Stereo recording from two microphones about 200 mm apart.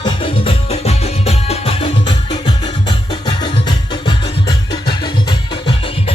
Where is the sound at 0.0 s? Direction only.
25° left (ahead or behind).